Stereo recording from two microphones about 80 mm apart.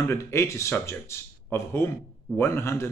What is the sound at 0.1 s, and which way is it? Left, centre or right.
Speech, left.